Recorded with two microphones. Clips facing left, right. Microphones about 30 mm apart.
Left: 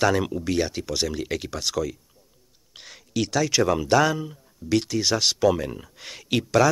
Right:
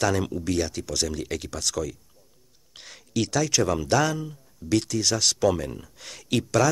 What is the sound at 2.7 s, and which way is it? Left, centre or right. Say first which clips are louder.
Speech: left 1 dB; centre.